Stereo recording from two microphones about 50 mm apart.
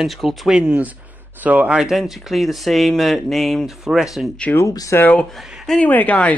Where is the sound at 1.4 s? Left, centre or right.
Right.